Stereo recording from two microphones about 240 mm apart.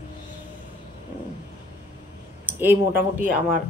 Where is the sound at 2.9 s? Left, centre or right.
Right.